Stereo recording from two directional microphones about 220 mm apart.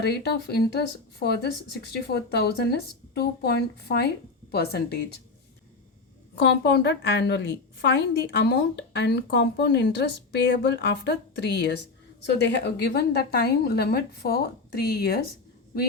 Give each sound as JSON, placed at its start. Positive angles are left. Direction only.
{"t": 0.0, "sound": "a woman's voice", "side_deg": 45}
{"t": 6.4, "sound": "a woman's voice", "side_deg": 50}